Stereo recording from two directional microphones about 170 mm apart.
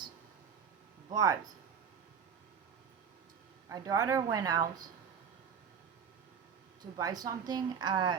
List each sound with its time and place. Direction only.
1.1 s a woman's voice: 20° right (ahead or behind)
3.7 s a woman's voice: 20° right (ahead or behind)
6.9 s a woman's voice: 25° right (ahead or behind)